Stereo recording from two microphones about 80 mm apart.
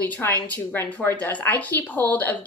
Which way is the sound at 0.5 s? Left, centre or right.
Centre.